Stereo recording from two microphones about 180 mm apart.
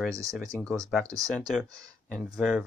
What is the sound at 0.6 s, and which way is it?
Speech, 5° left (ahead or behind).